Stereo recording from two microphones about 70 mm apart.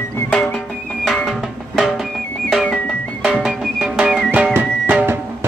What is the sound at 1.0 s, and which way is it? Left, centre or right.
Music, centre.